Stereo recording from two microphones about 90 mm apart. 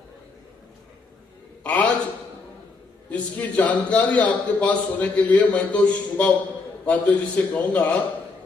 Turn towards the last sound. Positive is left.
turn(degrees=15)  # may be behind; listen again after turning